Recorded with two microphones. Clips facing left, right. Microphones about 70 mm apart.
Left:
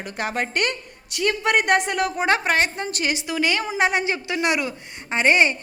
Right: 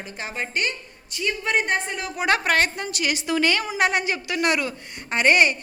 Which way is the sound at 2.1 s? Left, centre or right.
Left.